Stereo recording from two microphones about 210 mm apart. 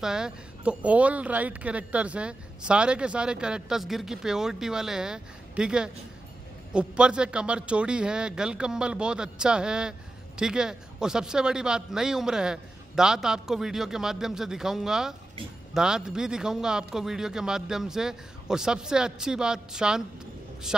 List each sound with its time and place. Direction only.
0.0 s a man's voice: 5° right (ahead or behind)